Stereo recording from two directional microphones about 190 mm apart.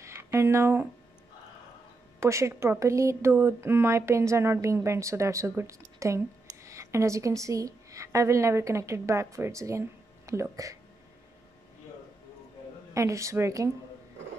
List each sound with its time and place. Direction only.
0.0 s a sound: 15° right (ahead or behind)
2.1 s a woman's voice: 15° right (ahead or behind)
12.9 s a woman's voice: 15° right (ahead or behind)